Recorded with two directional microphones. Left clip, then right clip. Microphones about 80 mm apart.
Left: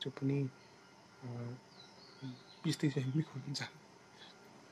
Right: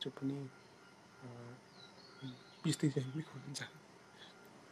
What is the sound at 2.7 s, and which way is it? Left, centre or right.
Speech, left.